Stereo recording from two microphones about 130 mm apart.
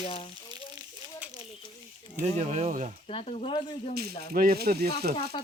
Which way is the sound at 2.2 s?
65° right (ahead or behind).